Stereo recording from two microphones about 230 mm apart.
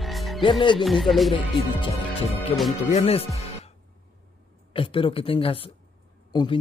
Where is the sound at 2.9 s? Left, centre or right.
Left.